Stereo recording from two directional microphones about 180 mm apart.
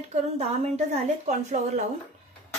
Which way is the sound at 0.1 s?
35° right (ahead or behind).